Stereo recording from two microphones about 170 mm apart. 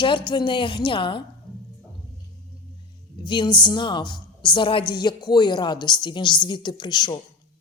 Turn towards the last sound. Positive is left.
turn(degrees=25)  # may be behind; listen again after turning